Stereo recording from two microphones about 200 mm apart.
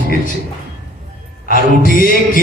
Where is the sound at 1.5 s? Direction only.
45° left (ahead or behind).